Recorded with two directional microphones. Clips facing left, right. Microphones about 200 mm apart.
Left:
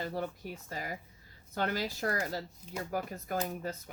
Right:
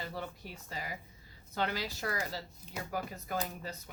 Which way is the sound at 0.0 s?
45° left (ahead or behind).